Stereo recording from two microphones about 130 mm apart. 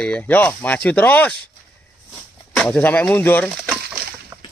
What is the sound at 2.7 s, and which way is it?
Speech, 15° left (ahead or behind).